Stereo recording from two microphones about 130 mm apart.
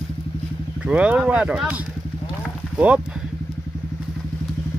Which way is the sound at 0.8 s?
10° right (ahead or behind).